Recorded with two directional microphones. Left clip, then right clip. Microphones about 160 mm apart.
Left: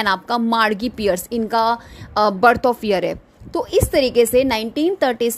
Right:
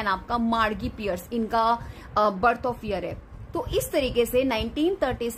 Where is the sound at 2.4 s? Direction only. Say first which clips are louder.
Left 9 dB; 50° left (ahead or behind).